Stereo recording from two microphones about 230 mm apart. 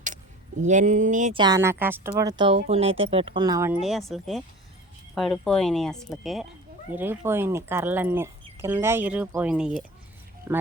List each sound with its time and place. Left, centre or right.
0.6 s speech: right
1.4 s speech: centre
2.6 s speech: right
3.8 s speech: centre